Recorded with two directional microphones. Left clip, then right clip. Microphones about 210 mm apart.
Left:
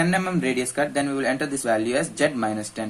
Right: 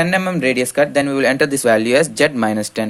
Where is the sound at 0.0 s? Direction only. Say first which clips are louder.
Right 7 dB; 40° right (ahead or behind).